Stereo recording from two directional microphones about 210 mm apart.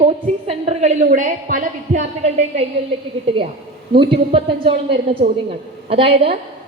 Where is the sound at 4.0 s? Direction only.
25° right (ahead or behind).